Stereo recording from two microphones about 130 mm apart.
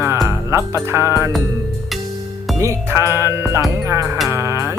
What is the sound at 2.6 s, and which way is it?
Music, 20° right (ahead or behind).